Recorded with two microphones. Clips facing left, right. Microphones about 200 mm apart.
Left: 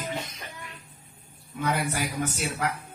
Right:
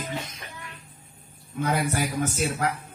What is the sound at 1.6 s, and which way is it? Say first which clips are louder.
Music: right 2 dB; 45° right (ahead or behind).